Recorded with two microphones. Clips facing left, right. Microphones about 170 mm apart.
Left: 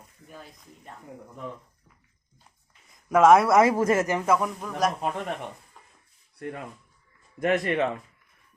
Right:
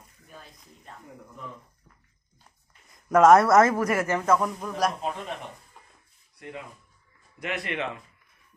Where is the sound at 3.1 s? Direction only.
5° left (ahead or behind).